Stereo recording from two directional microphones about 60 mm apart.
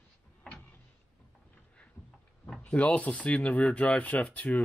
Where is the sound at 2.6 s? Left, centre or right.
Left.